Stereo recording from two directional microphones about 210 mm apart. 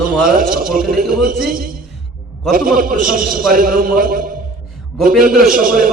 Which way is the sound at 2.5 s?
45° right (ahead or behind).